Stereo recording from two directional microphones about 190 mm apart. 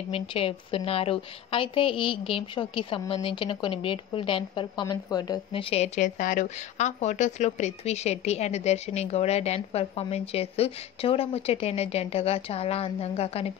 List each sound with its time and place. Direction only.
0.1 s a woman's voice: 30° left (ahead or behind)